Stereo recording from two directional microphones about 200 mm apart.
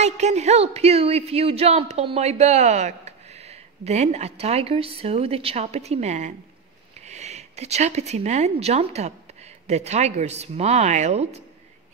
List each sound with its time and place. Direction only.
0.0 s speech: 35° right (ahead or behind)